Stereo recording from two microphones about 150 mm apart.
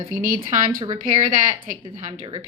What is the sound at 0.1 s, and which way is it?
Speech, 65° right (ahead or behind).